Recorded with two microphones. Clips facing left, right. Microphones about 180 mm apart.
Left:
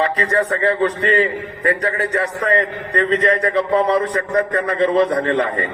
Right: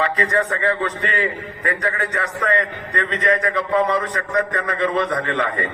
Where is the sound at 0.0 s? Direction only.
35° left (ahead or behind).